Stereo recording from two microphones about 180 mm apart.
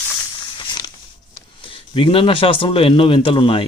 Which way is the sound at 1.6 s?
30° left (ahead or behind).